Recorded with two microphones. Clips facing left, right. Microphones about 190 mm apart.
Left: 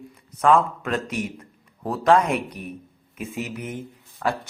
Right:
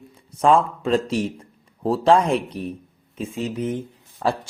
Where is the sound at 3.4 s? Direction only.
30° right (ahead or behind).